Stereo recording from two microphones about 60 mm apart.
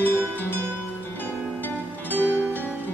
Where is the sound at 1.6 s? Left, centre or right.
Left.